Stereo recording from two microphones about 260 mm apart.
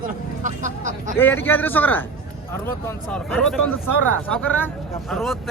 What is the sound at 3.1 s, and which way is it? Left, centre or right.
A man's voice, centre.